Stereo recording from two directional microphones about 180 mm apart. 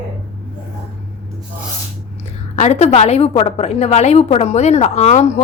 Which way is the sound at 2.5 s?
40° left (ahead or behind).